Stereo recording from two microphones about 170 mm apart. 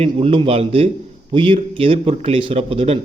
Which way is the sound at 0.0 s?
35° right (ahead or behind).